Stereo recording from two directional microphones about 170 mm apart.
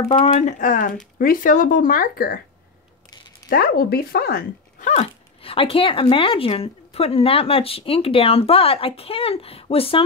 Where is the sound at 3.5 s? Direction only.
60° left (ahead or behind).